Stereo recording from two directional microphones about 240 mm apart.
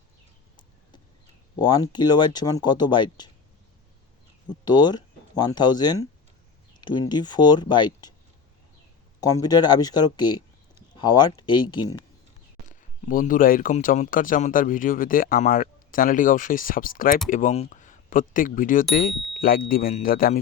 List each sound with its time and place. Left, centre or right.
1.5 s speech: centre
4.6 s speech: centre
7.1 s speech: centre
9.2 s speech: centre
12.6 s speech: left